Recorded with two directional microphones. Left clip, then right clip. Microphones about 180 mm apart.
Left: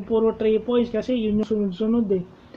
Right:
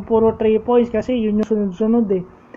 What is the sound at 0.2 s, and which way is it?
Speech, 20° left (ahead or behind).